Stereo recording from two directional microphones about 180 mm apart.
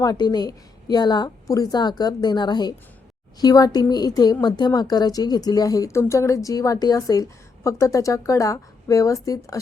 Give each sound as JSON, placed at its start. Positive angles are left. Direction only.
{"t": 0.0, "sound": "speech", "side_deg": 20}